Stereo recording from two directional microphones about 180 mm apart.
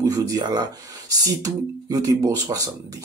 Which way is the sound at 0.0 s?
20° right (ahead or behind).